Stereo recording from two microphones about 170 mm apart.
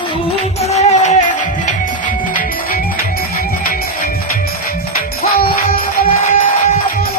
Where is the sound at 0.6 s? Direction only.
40° left (ahead or behind).